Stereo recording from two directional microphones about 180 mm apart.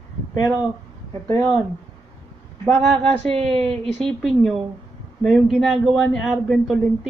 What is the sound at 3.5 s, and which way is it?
Speech, 35° right (ahead or behind).